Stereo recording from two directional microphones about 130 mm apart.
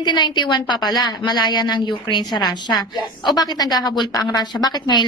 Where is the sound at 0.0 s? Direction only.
35° left (ahead or behind).